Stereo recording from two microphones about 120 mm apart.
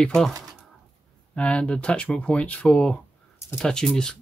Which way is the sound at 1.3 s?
10° left (ahead or behind).